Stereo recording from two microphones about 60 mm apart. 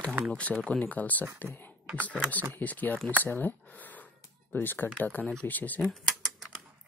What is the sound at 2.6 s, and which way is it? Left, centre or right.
Speech, left.